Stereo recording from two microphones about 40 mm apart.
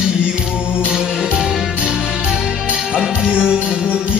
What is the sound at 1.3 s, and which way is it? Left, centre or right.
Music, centre.